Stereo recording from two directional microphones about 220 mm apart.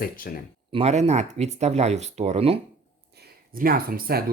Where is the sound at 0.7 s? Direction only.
30° right (ahead or behind).